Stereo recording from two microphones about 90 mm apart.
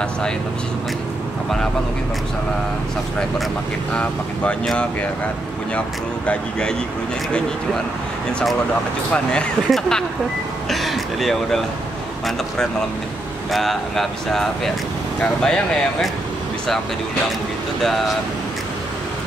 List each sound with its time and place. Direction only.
3.9 s speech: 15° left (ahead or behind)
9.1 s speech: 10° left (ahead or behind)
13.5 s speech: centre (ahead or behind)